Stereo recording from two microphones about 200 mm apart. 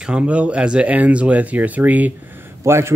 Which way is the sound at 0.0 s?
5° right (ahead or behind).